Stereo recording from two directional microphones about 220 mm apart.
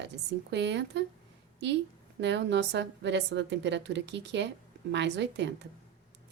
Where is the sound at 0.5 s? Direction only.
50° right (ahead or behind).